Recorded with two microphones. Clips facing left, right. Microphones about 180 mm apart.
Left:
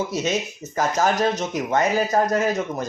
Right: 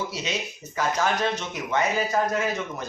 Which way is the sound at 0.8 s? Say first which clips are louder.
Left 4 dB; 40° left (ahead or behind).